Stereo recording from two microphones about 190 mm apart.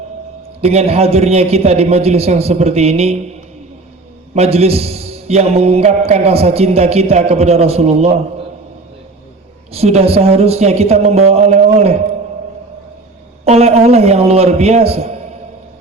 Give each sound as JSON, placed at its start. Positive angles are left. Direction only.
{"t": 0.6, "sound": "a man's voice", "side_deg": -35}
{"t": 4.4, "sound": "a man's voice", "side_deg": -35}
{"t": 9.7, "sound": "a man's voice", "side_deg": -35}
{"t": 13.4, "sound": "a man's voice", "side_deg": -35}